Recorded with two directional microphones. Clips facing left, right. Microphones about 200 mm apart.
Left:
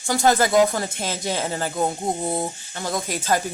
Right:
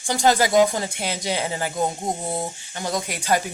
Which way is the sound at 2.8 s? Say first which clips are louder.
Even; 15° right (ahead or behind).